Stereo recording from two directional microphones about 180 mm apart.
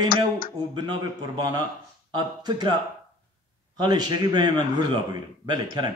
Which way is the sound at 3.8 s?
25° right (ahead or behind).